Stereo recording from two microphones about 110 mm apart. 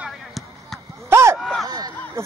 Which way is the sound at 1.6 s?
35° right (ahead or behind).